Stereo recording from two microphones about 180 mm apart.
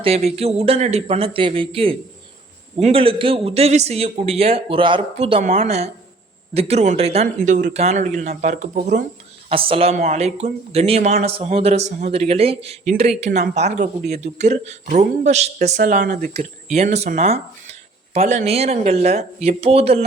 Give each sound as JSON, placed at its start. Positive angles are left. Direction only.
{"t": 0.3, "sound": "speech", "side_deg": -35}
{"t": 9.5, "sound": "speech", "side_deg": -30}
{"t": 15.8, "sound": "speech", "side_deg": -50}
{"t": 16.7, "sound": "speech", "side_deg": -35}